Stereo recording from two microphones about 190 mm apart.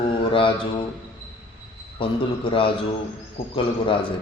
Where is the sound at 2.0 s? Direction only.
25° left (ahead or behind).